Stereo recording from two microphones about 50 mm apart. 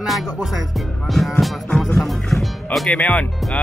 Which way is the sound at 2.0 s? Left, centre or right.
Centre.